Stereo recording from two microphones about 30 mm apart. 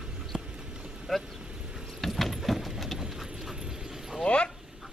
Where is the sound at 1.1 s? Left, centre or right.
Centre.